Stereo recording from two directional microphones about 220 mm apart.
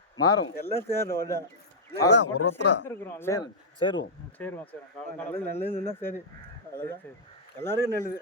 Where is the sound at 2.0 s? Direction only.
55° left (ahead or behind).